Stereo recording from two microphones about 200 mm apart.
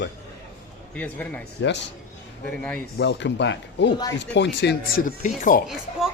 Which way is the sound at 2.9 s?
60° left (ahead or behind).